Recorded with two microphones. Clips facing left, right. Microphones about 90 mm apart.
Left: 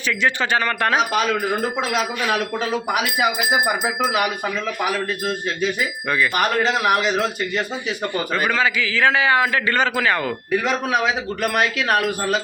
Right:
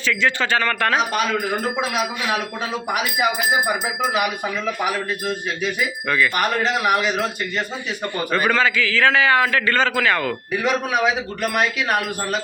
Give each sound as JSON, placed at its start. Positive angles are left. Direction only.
{"t": 0.1, "sound": "a man's voice", "side_deg": 20}
{"t": 1.9, "sound": "speech", "side_deg": -5}
{"t": 3.8, "sound": "speech", "side_deg": 0}
{"t": 8.6, "sound": "a man's voice", "side_deg": 15}
{"t": 10.5, "sound": "speech", "side_deg": -5}